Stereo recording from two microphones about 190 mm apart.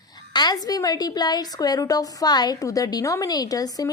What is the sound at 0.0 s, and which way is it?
A woman's voice, 20° left (ahead or behind).